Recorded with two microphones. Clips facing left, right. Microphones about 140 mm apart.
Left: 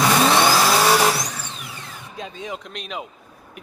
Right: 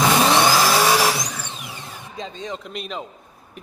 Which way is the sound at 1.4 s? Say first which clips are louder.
Right 1 dB; 20° right (ahead or behind).